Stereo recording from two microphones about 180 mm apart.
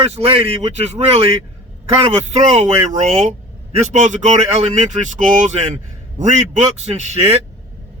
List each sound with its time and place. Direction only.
0.0 s speech: 35° right (ahead or behind)